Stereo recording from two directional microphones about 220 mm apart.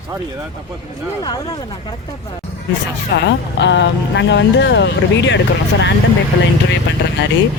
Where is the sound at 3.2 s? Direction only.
55° left (ahead or behind).